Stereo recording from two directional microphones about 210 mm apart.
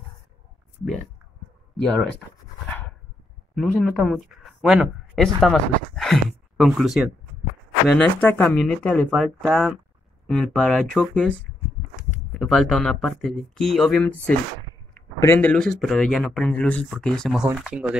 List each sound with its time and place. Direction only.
3.5 s speech: centre (ahead or behind)
12.4 s speech: centre (ahead or behind)